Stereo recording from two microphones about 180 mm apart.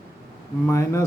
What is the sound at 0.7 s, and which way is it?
Speech, 15° left (ahead or behind).